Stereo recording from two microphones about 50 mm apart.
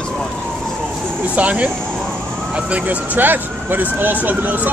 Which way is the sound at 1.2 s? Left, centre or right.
Right.